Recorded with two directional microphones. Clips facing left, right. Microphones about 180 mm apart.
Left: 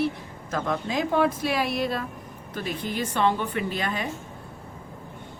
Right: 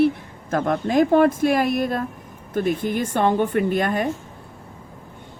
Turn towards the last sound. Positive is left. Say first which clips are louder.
# right 8 dB
turn(degrees=-50)  # may be behind; listen again after turning